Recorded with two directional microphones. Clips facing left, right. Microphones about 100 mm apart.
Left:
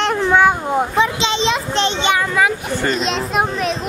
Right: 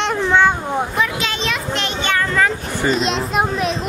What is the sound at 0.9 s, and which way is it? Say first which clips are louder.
A child's voice: left 4 dB; 25° left (ahead or behind).